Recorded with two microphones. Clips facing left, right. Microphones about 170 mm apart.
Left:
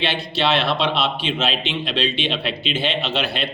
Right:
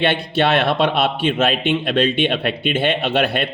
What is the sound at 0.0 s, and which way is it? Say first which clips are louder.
Speech: right 5 dB; 55° right (ahead or behind).